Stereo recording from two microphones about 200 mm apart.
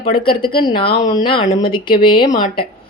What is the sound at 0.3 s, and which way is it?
Speech, 45° left (ahead or behind).